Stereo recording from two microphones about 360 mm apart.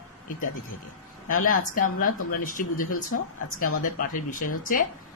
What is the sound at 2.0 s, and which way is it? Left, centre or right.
Speech, left.